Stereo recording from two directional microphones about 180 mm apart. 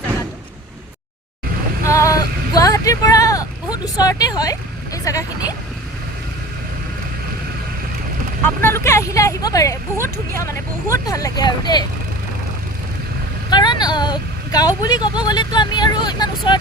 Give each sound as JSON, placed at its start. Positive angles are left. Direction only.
{"t": 1.8, "sound": "a sound", "side_deg": 15}
{"t": 5.0, "sound": "a woman's voice", "side_deg": 20}
{"t": 8.6, "sound": "a woman's voice", "side_deg": 15}
{"t": 13.5, "sound": "a woman's voice", "side_deg": 25}